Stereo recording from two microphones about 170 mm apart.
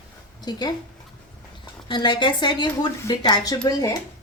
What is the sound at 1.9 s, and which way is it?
Speech, 25° left (ahead or behind).